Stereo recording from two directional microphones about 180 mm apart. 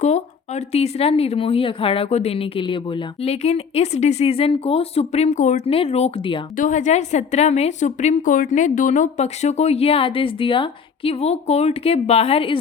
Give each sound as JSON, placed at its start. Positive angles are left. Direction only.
{"t": 0.0, "sound": "speech", "side_deg": 40}
{"t": 6.6, "sound": "speech", "side_deg": 45}